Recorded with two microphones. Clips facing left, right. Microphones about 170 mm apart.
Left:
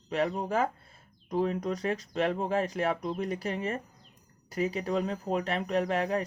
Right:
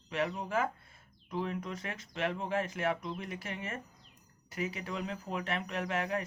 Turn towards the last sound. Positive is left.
turn(degrees=35)  # may be behind; listen again after turning